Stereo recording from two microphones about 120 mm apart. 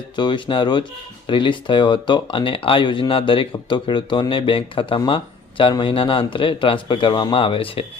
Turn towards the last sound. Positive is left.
turn(degrees=50)  # may be behind; listen again after turning